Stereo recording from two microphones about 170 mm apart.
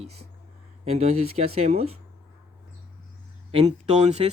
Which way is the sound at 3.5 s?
35° right (ahead or behind).